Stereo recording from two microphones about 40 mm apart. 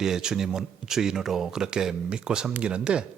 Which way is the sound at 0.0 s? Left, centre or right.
Centre.